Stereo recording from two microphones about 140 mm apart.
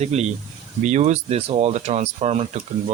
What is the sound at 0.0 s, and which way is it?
Speech, 50° right (ahead or behind).